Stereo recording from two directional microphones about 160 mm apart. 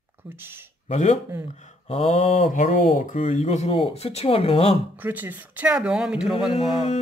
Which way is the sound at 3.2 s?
45° left (ahead or behind).